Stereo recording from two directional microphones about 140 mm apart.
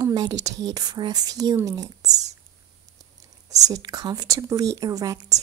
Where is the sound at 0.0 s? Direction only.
25° right (ahead or behind).